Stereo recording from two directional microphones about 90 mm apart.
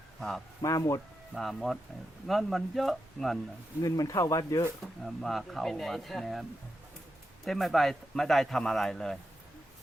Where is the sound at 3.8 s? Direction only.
40° left (ahead or behind).